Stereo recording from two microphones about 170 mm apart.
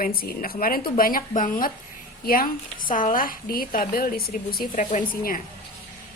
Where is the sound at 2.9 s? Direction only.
50° left (ahead or behind).